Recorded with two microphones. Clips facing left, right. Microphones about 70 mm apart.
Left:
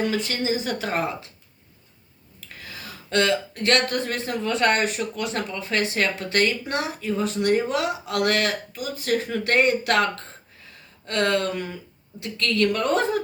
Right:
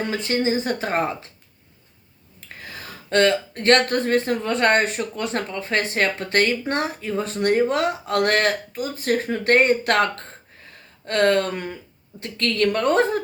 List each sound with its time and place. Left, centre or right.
0.0 s speech: right
2.4 s speech: right